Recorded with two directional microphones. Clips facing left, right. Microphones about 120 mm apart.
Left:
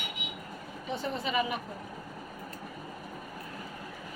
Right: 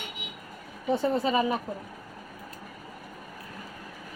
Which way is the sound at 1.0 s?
35° right (ahead or behind).